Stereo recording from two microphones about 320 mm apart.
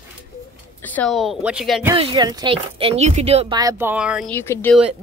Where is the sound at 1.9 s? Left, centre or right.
Centre.